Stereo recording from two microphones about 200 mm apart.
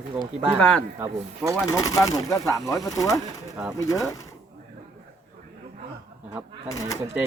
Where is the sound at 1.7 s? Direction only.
20° left (ahead or behind).